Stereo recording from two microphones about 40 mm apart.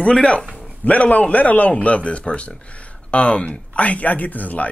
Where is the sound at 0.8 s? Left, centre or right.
Left.